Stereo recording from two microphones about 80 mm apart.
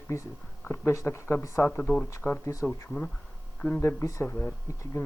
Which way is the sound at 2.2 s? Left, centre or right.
Left.